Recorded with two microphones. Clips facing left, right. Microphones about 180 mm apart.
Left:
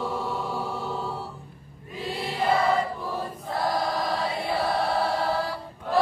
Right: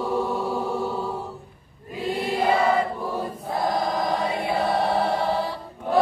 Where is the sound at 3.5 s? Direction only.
20° right (ahead or behind).